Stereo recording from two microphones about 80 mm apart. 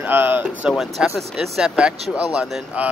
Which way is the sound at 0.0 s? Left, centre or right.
Right.